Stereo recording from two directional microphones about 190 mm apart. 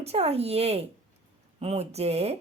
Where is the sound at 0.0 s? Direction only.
35° right (ahead or behind).